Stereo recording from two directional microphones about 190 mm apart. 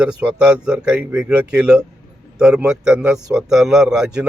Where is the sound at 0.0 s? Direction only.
5° right (ahead or behind).